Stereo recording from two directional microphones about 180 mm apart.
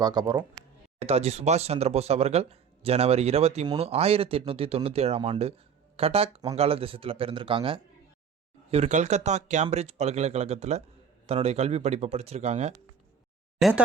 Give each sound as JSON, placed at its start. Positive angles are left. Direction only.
{"t": 0.0, "sound": "speech", "side_deg": -20}
{"t": 1.0, "sound": "speech", "side_deg": -35}
{"t": 13.6, "sound": "speech", "side_deg": 0}